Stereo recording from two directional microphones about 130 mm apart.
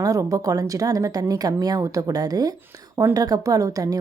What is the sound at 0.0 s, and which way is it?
A woman's voice, 25° right (ahead or behind).